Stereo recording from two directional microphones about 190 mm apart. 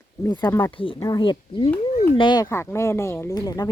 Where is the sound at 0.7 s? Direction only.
25° left (ahead or behind).